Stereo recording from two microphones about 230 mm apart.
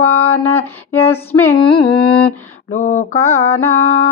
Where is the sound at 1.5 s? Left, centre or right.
Left.